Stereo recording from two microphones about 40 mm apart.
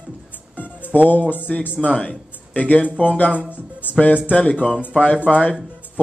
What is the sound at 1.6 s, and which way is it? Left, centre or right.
Speech, left.